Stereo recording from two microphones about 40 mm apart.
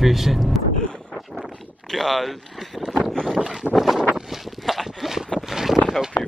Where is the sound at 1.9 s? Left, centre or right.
Centre.